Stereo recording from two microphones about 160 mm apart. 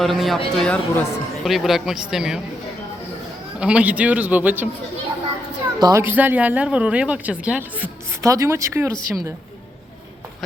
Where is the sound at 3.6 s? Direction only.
5° right (ahead or behind).